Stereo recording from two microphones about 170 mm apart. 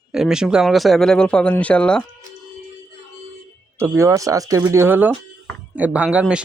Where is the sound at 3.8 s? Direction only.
15° right (ahead or behind).